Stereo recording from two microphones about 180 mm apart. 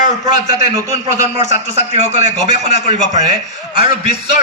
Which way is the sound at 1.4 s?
40° right (ahead or behind).